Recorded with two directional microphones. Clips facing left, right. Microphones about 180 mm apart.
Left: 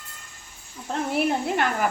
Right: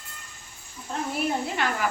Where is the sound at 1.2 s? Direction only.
55° left (ahead or behind).